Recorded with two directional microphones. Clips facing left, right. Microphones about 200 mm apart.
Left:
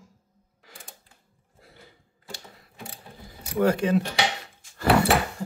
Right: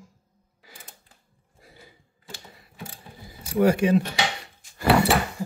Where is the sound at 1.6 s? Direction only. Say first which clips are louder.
Right 1 dB; 10° right (ahead or behind).